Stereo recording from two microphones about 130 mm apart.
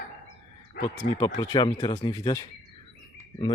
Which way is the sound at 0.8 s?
30° left (ahead or behind).